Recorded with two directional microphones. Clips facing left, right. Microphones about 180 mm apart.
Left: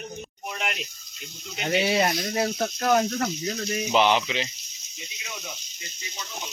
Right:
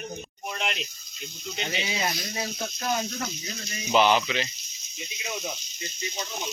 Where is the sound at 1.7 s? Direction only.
65° left (ahead or behind).